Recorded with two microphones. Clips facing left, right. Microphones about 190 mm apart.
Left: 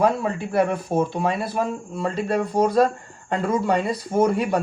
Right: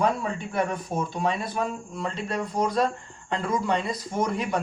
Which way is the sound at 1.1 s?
5° left (ahead or behind).